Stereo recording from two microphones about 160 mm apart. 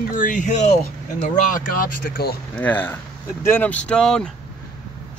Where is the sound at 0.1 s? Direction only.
55° left (ahead or behind).